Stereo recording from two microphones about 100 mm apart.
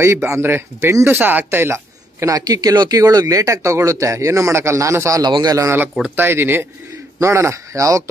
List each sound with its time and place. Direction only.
0.0 s speech: 30° right (ahead or behind)
5.2 s speech: 40° right (ahead or behind)
6.1 s a man's voice: 20° right (ahead or behind)